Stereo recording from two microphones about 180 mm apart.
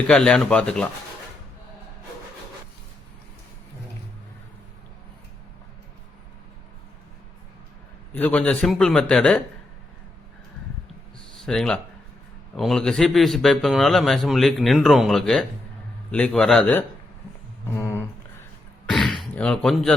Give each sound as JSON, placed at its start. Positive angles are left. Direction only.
{"t": 0.1, "sound": "speech", "side_deg": 5}
{"t": 8.1, "sound": "speech", "side_deg": 10}
{"t": 11.4, "sound": "speech", "side_deg": 5}
{"t": 17.7, "sound": "a sound", "side_deg": 15}
{"t": 18.9, "sound": "throat clearing", "side_deg": 0}
{"t": 19.2, "sound": "speech", "side_deg": 5}